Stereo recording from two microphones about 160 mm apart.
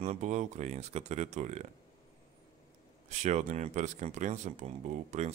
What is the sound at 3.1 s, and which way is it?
Speech, 45° right (ahead or behind).